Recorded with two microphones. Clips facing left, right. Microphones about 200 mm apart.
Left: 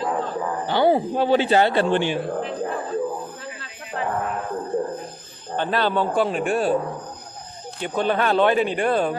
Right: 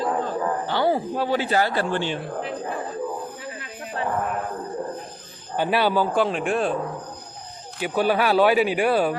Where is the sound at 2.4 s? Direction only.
Centre (ahead or behind).